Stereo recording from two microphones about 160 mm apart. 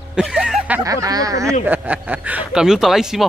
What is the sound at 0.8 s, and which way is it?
A man's voice, 20° right (ahead or behind).